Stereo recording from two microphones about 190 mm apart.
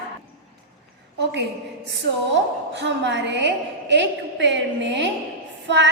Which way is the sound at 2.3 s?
65° right (ahead or behind).